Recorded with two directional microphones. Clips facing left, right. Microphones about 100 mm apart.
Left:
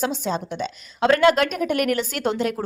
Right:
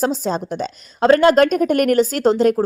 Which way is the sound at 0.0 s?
40° right (ahead or behind).